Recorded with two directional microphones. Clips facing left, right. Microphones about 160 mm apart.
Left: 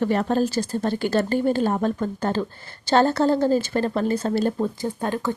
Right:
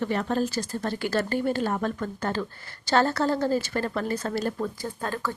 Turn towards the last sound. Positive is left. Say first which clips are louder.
# left 6 dB
turn(degrees=20)  # may be behind; listen again after turning